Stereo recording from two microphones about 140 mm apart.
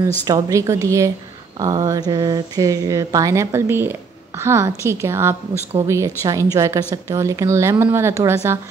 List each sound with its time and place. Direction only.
0.3 s a woman's voice: 20° right (ahead or behind)